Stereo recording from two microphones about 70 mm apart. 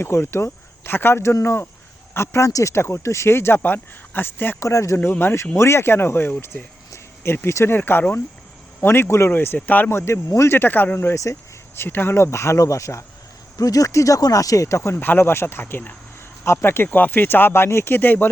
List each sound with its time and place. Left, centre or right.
0.0 s speech: left
4.6 s a man's voice: left
5.1 s speech: left
9.6 s speech: left
9.9 s speech: left
10.5 s a man's voice: left
13.6 s speech: left
14.9 s speech: left